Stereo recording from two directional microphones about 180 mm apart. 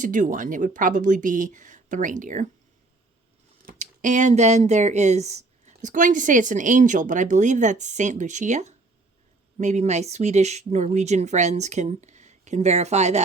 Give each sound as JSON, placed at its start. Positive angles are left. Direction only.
{"t": 0.0, "sound": "speech", "side_deg": -45}
{"t": 3.7, "sound": "speech", "side_deg": -45}